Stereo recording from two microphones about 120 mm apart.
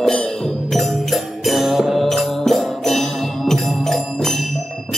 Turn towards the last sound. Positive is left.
turn(degrees=5)  # may be behind; listen again after turning